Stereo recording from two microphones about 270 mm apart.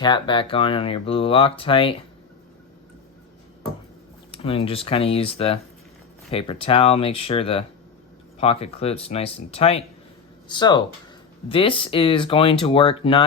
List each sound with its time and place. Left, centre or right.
0.0 s speech: centre
4.3 s speech: left